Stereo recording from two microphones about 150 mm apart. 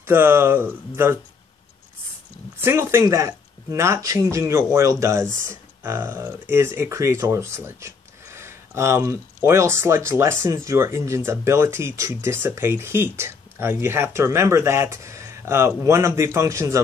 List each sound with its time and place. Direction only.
0.0 s speech: 15° right (ahead or behind)
2.6 s speech: 15° right (ahead or behind)